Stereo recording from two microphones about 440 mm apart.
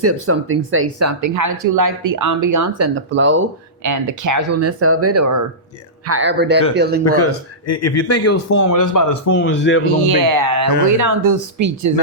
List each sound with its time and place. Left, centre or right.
0.0 s speech: right
3.8 s speech: right
7.2 s speech: left
9.3 s a man's voice: left
10.1 s speech: right